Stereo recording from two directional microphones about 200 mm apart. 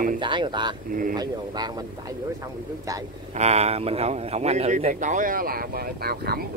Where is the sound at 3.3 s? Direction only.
35° right (ahead or behind).